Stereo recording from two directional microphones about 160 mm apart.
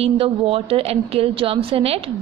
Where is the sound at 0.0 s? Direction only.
35° right (ahead or behind).